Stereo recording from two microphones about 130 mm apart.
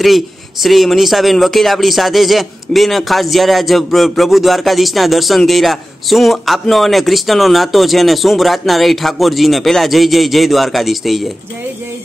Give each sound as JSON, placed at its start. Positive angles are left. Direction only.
{"t": 0.0, "sound": "speech", "side_deg": 0}